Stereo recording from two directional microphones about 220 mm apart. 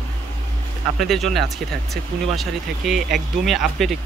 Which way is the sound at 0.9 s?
Centre (ahead or behind).